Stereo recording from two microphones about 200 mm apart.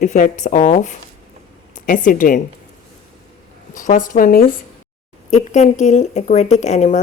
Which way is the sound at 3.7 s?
40° left (ahead or behind).